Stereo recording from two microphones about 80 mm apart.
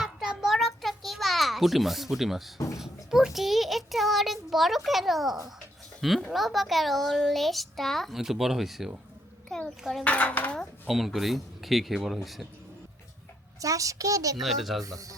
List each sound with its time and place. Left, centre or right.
0.0 s a sound: centre
2.7 s child singing: centre
6.0 s a child's voice: centre
9.5 s dishes: centre
10.0 s dishes: centre
10.8 s a child's voice: centre
13.6 s a child's voice: right
14.4 s a child's voice: centre
14.8 s a child's voice: right